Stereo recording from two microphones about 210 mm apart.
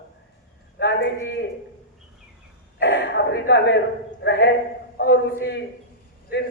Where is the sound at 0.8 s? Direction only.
55° left (ahead or behind).